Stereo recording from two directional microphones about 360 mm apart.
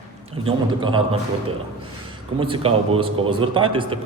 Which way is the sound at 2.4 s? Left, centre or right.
Centre.